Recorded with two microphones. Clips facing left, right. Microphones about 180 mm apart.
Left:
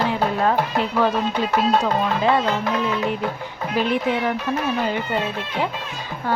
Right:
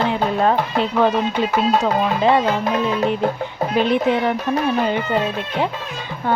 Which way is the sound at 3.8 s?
25° right (ahead or behind).